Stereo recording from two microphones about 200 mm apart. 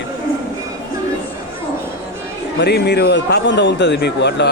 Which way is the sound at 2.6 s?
55° left (ahead or behind).